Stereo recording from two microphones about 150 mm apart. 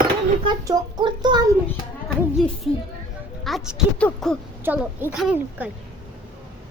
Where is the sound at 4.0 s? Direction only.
5° left (ahead or behind).